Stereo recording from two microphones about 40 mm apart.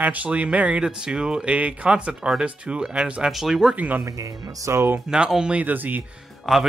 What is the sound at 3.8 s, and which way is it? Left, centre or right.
Speech, right.